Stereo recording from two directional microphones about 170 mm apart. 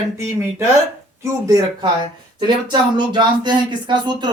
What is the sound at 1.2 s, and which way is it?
A man's voice, 20° right (ahead or behind).